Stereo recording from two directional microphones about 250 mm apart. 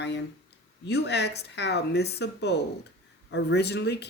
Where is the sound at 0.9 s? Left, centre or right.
Left.